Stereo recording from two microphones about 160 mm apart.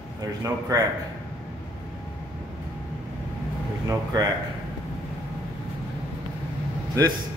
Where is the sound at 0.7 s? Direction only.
20° right (ahead or behind).